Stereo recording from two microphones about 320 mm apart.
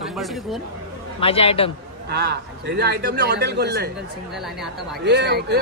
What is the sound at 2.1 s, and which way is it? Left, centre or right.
A man's voice, right.